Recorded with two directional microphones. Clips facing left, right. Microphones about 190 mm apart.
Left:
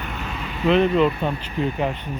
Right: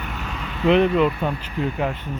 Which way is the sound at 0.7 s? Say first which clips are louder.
Right 1 dB; 15° right (ahead or behind).